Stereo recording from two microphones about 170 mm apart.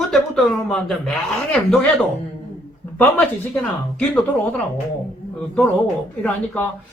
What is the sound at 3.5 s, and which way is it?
Speech, 5° left (ahead or behind).